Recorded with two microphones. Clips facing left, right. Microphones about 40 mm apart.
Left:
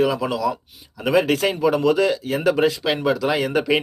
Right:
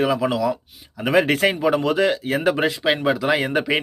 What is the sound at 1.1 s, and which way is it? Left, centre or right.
Speech, right.